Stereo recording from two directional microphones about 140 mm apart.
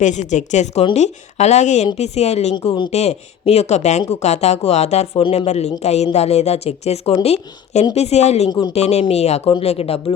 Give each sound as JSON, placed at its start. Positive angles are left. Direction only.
{"t": 0.0, "sound": "speech", "side_deg": 60}
{"t": 2.6, "sound": "speech", "side_deg": 35}
{"t": 2.9, "sound": "speech", "side_deg": 50}
{"t": 5.2, "sound": "speech", "side_deg": 40}
{"t": 5.5, "sound": "speech", "side_deg": 50}
{"t": 8.4, "sound": "speech", "side_deg": 30}
{"t": 8.7, "sound": "speech", "side_deg": 50}